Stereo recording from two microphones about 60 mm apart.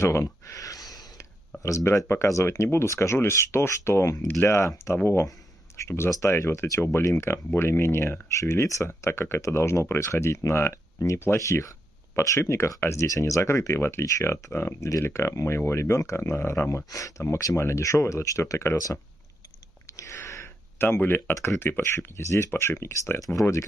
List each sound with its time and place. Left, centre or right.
0.0 s a sound: left
1.6 s speech: left
2.4 s speech: left
20.0 s sniff: left
21.0 s speech: left
23.1 s speech: left